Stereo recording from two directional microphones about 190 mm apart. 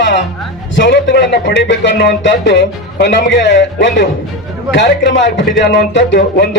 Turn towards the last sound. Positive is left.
turn(degrees=65)  # may be behind; listen again after turning